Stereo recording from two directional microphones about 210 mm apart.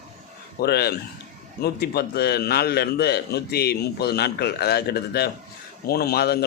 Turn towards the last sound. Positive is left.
turn(degrees=50)  # may be behind; listen again after turning